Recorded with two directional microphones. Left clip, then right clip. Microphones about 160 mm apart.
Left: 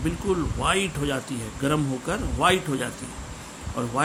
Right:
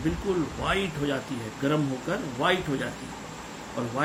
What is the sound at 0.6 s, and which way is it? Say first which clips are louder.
Speech: left 4 dB; 70° left (ahead or behind).